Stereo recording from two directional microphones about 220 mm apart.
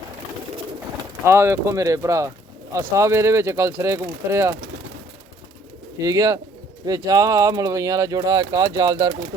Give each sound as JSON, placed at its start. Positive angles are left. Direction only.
{"t": 1.2, "sound": "speech", "side_deg": -10}
{"t": 6.0, "sound": "speech", "side_deg": -15}